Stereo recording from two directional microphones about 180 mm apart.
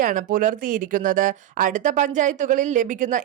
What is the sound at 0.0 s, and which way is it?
A woman's voice, 50° right (ahead or behind).